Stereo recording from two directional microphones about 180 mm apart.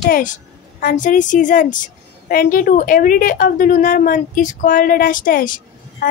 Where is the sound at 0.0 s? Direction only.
50° left (ahead or behind).